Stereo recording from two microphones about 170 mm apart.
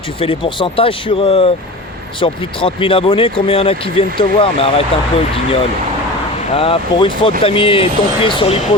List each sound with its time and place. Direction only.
0.2 s speech: 30° left (ahead or behind)